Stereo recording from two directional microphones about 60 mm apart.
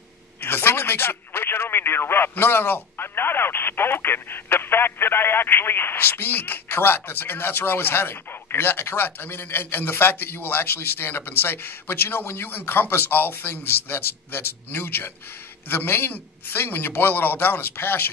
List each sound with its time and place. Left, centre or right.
0.4 s speech: left